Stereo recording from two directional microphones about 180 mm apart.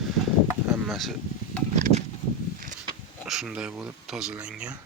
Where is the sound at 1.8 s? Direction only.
40° right (ahead or behind).